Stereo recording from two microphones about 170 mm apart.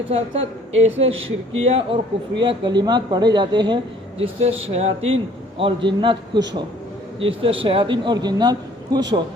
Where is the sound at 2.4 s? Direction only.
30° right (ahead or behind).